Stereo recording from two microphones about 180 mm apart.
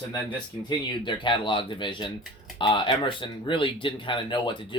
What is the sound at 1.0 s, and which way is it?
Speech, 25° left (ahead or behind).